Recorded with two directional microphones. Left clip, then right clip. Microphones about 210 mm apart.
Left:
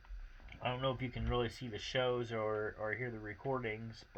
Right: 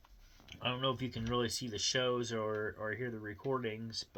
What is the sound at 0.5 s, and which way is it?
Speech, 10° right (ahead or behind).